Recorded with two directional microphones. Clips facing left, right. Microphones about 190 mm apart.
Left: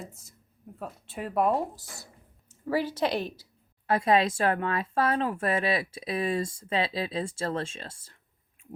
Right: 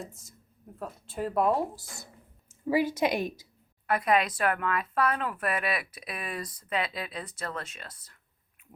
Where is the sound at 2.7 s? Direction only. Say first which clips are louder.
Right 1 dB; 10° right (ahead or behind).